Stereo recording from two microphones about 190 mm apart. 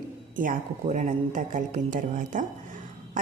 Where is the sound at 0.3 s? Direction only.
40° right (ahead or behind).